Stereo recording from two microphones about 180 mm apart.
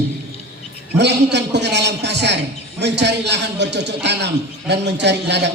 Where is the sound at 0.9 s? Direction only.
70° right (ahead or behind).